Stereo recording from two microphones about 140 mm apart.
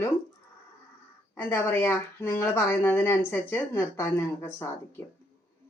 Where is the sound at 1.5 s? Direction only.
15° left (ahead or behind).